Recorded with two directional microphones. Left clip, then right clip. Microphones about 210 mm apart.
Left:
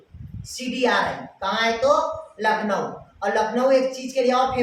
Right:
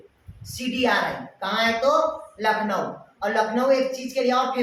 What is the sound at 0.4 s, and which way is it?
A woman's voice, 15° left (ahead or behind).